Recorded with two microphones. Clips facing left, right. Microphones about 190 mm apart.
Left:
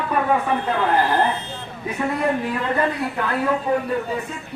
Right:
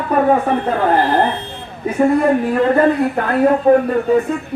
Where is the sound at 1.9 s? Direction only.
45° right (ahead or behind).